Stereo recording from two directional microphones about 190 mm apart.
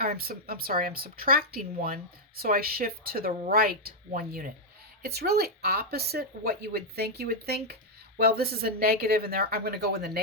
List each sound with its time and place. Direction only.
0.0 s speech: 50° right (ahead or behind)